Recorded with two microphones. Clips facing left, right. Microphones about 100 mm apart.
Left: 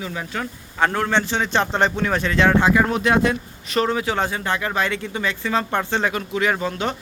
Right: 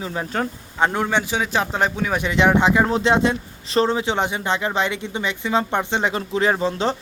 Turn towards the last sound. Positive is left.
turn(degrees=-30)  # may be behind; listen again after turning